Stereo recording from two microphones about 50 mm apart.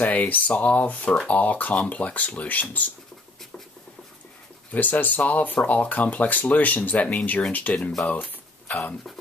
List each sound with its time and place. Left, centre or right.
0.0 s speech: left
4.6 s speech: left
8.1 s a sound: left